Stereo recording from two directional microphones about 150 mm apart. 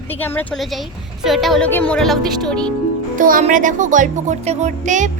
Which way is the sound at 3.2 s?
65° right (ahead or behind).